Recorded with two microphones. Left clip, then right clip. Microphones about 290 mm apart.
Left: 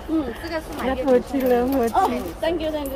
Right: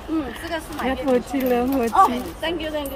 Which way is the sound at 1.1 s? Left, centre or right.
Centre.